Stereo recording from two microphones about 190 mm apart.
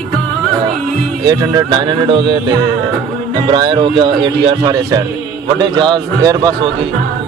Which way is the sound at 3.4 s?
25° right (ahead or behind).